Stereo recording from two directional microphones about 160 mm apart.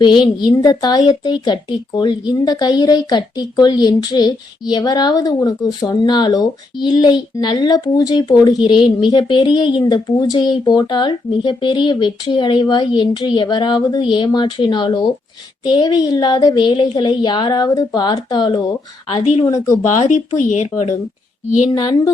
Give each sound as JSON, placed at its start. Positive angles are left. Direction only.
{"t": 0.0, "sound": "speech", "side_deg": 30}
{"t": 19.8, "sound": "speech", "side_deg": 50}
{"t": 21.7, "sound": "speech", "side_deg": 25}